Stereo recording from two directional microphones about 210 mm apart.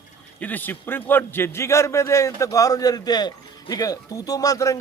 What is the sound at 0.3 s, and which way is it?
A man's voice, 10° left (ahead or behind).